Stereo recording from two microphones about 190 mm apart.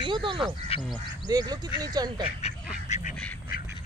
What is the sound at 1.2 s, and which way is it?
Speech, 20° right (ahead or behind).